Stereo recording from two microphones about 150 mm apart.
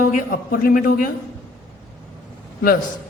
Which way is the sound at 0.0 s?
70° left (ahead or behind).